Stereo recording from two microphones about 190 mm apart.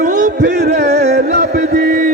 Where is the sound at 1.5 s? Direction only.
55° right (ahead or behind).